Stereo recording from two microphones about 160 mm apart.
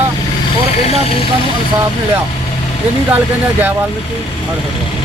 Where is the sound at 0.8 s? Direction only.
40° left (ahead or behind).